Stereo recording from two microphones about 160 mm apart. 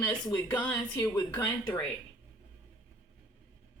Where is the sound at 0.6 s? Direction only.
15° left (ahead or behind).